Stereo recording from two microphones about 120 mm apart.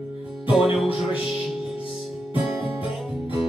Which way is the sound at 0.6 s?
50° left (ahead or behind).